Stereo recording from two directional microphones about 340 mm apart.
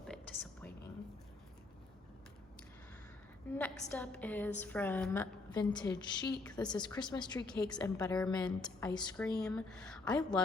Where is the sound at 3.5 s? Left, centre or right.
Centre.